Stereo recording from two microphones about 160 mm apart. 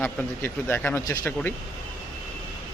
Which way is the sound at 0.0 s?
10° left (ahead or behind).